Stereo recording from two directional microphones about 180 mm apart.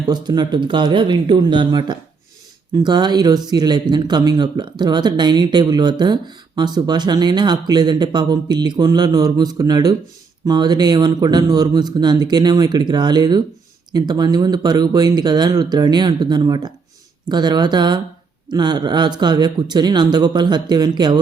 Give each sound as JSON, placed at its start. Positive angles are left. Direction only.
{"t": 0.0, "sound": "speech", "side_deg": -25}